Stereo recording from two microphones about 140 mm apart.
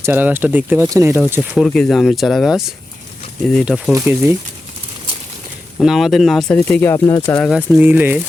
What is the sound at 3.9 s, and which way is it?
Speech, 15° right (ahead or behind).